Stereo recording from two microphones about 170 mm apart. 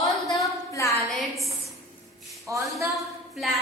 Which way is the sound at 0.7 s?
20° left (ahead or behind).